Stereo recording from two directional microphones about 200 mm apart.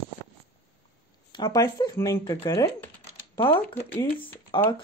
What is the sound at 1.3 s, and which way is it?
Speech, 20° left (ahead or behind).